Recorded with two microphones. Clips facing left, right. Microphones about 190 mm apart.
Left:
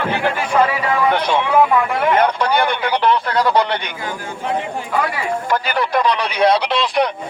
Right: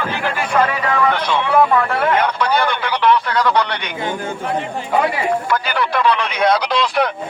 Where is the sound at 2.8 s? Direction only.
40° left (ahead or behind).